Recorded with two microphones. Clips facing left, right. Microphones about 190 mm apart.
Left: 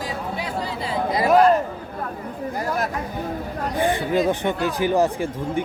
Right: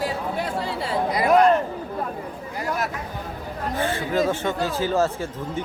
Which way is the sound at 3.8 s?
15° left (ahead or behind).